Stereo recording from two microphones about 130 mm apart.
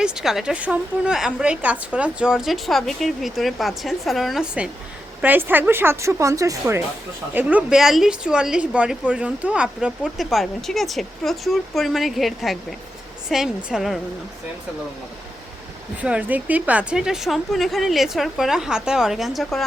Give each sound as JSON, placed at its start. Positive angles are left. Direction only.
{"t": 0.0, "sound": "a woman's voice", "side_deg": -5}
{"t": 7.3, "sound": "a woman's voice", "side_deg": -10}
{"t": 16.0, "sound": "a woman's voice", "side_deg": -10}